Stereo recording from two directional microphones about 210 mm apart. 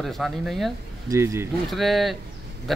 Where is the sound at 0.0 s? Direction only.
Centre (ahead or behind).